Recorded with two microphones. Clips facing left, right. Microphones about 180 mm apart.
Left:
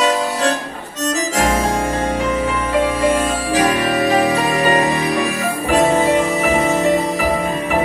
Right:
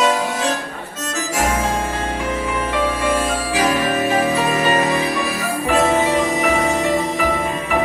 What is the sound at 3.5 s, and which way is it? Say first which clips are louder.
Music: left 2 dB; 35° left (ahead or behind).